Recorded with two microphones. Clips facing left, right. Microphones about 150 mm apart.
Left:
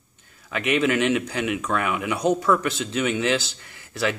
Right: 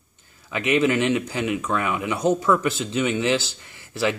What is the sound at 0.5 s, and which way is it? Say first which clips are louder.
Speech: right 1 dB; centre (ahead or behind).